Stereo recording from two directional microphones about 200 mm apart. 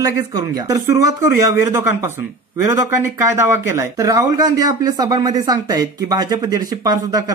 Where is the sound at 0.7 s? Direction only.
15° right (ahead or behind).